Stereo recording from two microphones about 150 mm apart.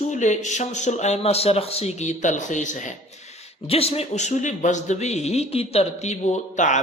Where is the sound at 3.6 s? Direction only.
40° left (ahead or behind).